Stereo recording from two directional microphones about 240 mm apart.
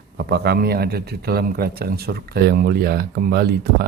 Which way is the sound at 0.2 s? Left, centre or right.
Right.